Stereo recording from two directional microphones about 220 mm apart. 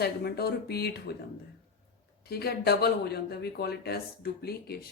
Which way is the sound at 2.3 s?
45° left (ahead or behind).